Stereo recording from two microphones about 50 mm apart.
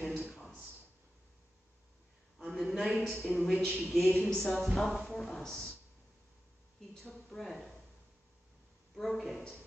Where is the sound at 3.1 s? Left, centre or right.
Left.